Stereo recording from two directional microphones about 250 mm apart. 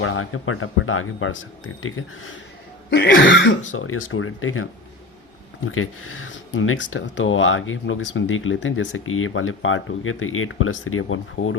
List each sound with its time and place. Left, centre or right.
0.0 s speech: left